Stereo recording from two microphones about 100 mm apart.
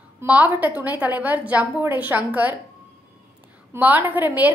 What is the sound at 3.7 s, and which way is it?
Speech, 20° right (ahead or behind).